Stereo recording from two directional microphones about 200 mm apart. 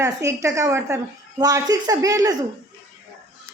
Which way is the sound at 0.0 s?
15° right (ahead or behind).